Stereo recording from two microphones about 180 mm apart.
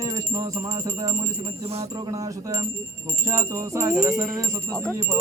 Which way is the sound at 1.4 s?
35° right (ahead or behind).